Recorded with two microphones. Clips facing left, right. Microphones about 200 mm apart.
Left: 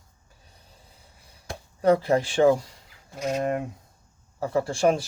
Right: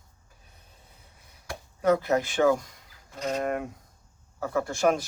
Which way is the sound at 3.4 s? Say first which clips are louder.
Left 2 dB; 30° left (ahead or behind).